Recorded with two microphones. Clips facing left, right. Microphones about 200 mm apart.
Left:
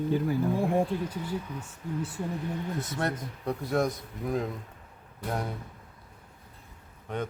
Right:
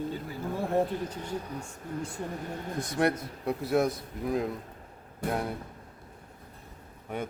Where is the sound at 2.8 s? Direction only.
10° right (ahead or behind).